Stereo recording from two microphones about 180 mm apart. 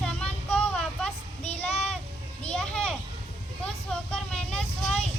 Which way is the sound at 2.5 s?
5° left (ahead or behind).